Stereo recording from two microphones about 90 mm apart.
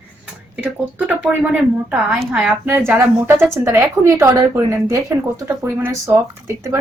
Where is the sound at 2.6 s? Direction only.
25° right (ahead or behind).